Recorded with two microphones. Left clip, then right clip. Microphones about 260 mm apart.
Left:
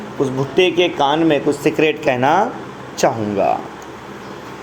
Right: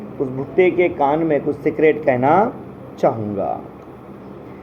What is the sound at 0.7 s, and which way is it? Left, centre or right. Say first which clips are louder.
Speech: left 2 dB; left.